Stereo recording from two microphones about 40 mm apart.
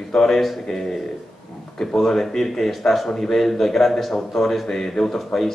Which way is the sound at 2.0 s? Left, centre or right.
Centre.